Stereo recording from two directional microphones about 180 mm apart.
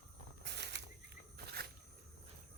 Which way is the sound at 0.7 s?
70° right (ahead or behind).